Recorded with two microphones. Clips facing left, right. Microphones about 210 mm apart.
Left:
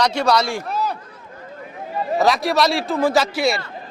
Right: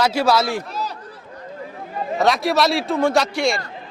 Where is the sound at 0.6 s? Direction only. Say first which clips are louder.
Left 4 dB; 55° left (ahead or behind).